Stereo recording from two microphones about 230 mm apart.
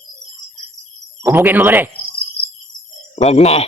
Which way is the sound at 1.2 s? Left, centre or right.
Centre.